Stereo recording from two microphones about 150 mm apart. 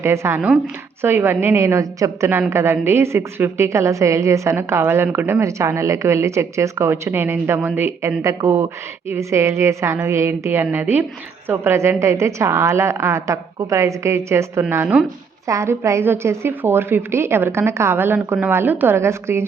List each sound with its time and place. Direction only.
0.0 s a woman's voice: 20° right (ahead or behind)